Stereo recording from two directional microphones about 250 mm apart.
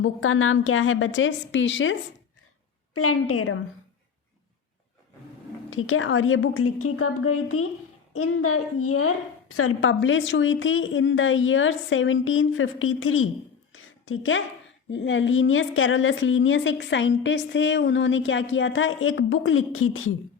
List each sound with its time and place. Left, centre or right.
0.0 s a woman's voice: left
2.9 s a woman's voice: left
5.7 s a woman's voice: left
13.7 s a sound: left
14.8 s a woman's voice: left